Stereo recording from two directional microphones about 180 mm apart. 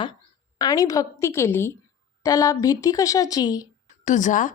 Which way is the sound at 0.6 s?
20° left (ahead or behind).